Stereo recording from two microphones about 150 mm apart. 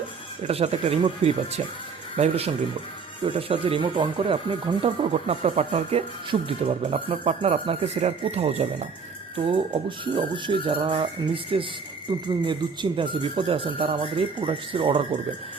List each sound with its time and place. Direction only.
0.4 s speech: 40° right (ahead or behind)
9.5 s speech: 30° right (ahead or behind)